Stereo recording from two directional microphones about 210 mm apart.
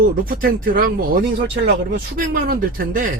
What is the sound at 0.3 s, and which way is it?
Speech, 40° right (ahead or behind).